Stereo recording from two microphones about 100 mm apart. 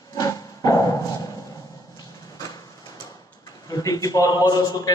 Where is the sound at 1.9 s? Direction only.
35° left (ahead or behind).